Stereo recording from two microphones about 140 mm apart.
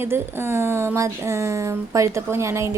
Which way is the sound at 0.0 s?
15° right (ahead or behind).